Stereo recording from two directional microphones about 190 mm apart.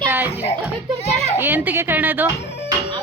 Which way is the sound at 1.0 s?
35° left (ahead or behind).